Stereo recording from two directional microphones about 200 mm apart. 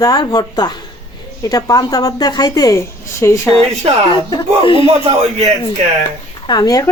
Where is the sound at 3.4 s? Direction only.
5° left (ahead or behind).